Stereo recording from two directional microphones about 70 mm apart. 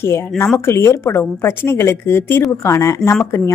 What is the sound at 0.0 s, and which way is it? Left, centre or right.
A woman's voice, left.